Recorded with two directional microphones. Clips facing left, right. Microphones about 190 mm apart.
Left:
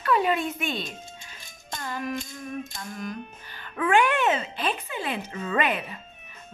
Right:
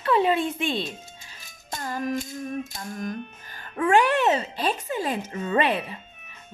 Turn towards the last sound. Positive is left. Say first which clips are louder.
# right 3 dB
turn(degrees=-30)  # may be behind; listen again after turning